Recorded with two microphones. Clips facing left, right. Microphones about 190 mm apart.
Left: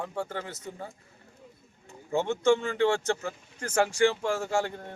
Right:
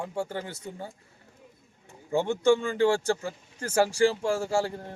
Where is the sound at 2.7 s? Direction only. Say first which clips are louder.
Right 2 dB; 35° right (ahead or behind).